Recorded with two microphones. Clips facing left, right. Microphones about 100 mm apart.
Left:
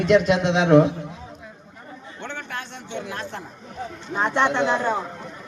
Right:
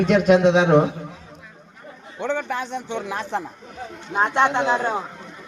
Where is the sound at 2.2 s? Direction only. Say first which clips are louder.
Right 10 dB; 90° right.